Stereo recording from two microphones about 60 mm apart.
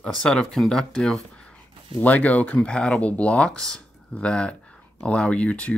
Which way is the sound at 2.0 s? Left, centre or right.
Left.